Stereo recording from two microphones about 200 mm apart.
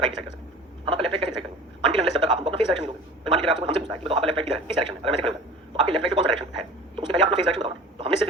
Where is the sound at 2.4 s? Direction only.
25° right (ahead or behind).